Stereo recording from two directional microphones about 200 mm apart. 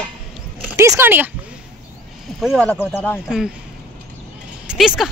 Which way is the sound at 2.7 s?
10° left (ahead or behind).